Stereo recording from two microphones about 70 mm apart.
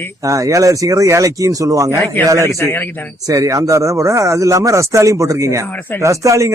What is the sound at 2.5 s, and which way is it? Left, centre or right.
Speech, left.